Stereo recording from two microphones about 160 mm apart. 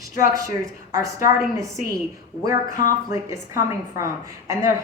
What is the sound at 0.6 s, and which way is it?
Speech, 20° right (ahead or behind).